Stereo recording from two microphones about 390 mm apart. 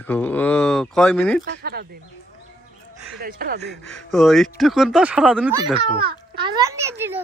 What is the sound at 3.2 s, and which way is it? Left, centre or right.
Speech, right.